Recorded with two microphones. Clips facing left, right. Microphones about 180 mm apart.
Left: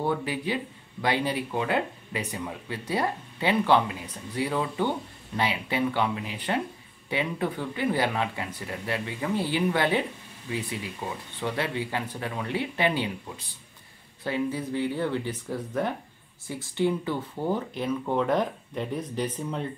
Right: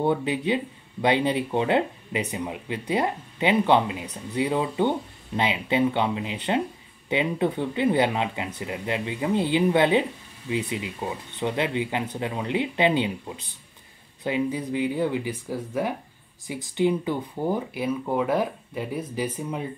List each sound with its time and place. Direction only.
0.0 s speech: 20° right (ahead or behind)